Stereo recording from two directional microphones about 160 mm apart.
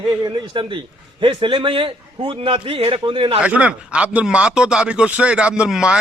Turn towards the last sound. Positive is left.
turn(degrees=-5)  # may be behind; listen again after turning